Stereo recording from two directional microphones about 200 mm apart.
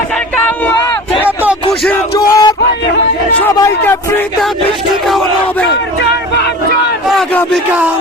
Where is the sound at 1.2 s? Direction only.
10° right (ahead or behind).